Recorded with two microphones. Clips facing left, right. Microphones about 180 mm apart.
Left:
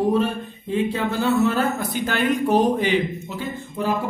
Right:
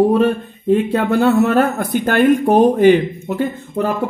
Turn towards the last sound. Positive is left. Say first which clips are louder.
# right 8 dB
turn(degrees=-55)  # may be behind; listen again after turning